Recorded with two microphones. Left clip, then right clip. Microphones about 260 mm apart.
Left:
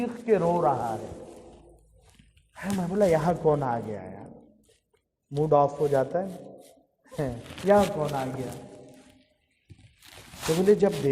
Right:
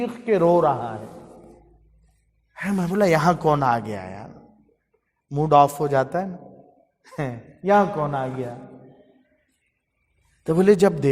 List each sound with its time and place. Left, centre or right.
0.0 s speech: right
2.6 s speech: right
5.3 s speech: right
10.7 s speech: right